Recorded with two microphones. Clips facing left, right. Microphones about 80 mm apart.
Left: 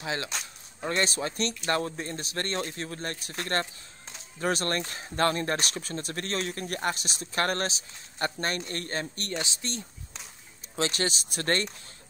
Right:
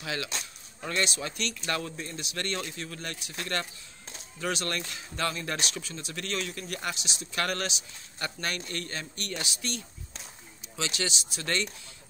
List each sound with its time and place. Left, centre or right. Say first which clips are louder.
0.0 s speech: left 2 dB; left
10.8 s speech: left 4 dB; left